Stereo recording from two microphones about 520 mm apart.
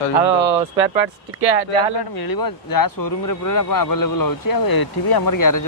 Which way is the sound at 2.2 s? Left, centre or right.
Left.